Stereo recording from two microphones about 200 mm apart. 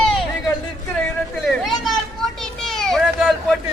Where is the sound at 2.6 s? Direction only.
Centre (ahead or behind).